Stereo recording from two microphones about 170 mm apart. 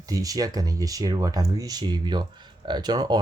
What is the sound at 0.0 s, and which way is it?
Speech, 20° right (ahead or behind).